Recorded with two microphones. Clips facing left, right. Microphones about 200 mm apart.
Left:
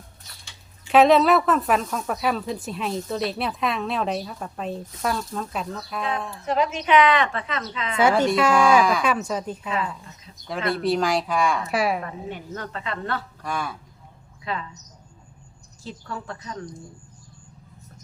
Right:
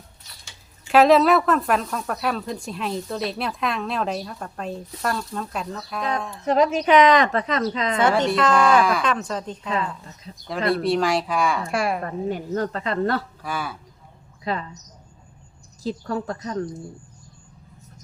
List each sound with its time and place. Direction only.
0.9 s speech: centre (ahead or behind)
6.4 s a woman's voice: 40° right (ahead or behind)
7.9 s speech: 10° left (ahead or behind)
12.0 s a woman's voice: 40° right (ahead or behind)
13.4 s speech: 5° right (ahead or behind)
14.5 s a woman's voice: 40° right (ahead or behind)
15.8 s a woman's voice: 40° right (ahead or behind)